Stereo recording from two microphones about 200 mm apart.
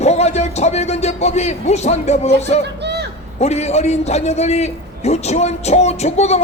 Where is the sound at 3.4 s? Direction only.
35° left (ahead or behind).